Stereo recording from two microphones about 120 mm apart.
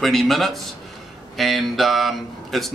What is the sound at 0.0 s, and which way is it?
A man's voice, centre (ahead or behind).